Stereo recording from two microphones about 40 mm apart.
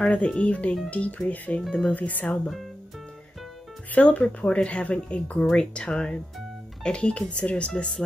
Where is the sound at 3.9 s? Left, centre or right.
Left.